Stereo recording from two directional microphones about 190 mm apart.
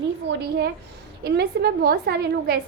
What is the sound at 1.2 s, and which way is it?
A woman's voice, 55° right (ahead or behind).